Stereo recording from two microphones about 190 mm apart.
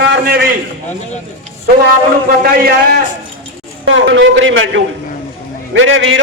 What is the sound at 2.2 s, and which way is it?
Speech, 50° right (ahead or behind).